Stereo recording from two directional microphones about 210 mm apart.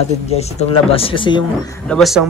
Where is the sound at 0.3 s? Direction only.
30° left (ahead or behind).